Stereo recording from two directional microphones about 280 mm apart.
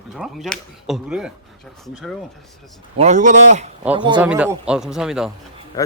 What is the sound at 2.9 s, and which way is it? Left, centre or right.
Speech, right.